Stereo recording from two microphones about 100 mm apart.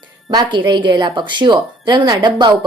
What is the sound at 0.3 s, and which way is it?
A woman's voice, 45° right (ahead or behind).